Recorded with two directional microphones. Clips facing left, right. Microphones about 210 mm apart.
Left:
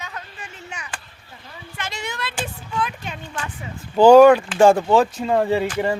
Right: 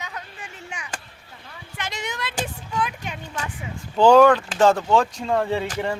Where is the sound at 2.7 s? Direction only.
10° right (ahead or behind).